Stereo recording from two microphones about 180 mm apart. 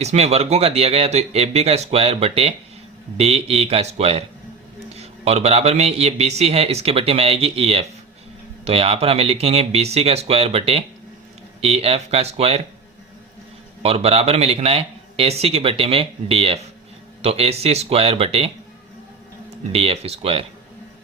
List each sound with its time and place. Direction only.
0.0 s a man's voice: 35° right (ahead or behind)
13.8 s a man's voice: 35° right (ahead or behind)
19.7 s a man's voice: 35° right (ahead or behind)